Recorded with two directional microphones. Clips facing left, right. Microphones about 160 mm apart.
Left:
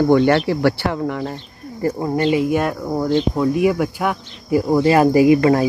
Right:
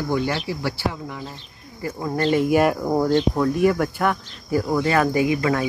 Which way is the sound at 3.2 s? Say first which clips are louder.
Left 2 dB; 5° left (ahead or behind).